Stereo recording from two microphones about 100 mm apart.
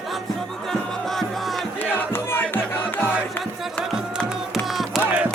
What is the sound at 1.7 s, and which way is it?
Music, 20° left (ahead or behind).